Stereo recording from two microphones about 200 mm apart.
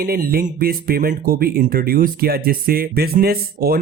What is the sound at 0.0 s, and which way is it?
Speech, 50° right (ahead or behind).